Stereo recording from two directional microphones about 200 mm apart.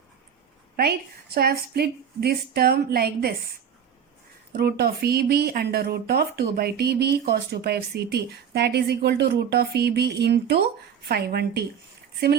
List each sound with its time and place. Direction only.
0.8 s speech: 50° right (ahead or behind)
4.5 s speech: 50° right (ahead or behind)